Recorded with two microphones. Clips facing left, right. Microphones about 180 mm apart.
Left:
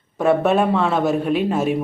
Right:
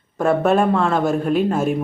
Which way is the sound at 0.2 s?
5° left (ahead or behind).